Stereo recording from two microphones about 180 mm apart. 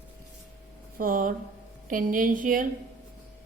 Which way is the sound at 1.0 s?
50° right (ahead or behind).